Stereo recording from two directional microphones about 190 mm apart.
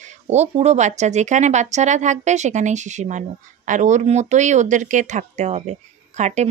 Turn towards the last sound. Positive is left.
turn(degrees=-35)  # may be behind; listen again after turning